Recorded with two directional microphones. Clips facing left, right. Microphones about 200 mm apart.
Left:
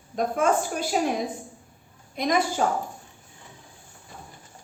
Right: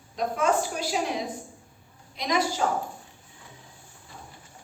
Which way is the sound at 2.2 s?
50° left (ahead or behind).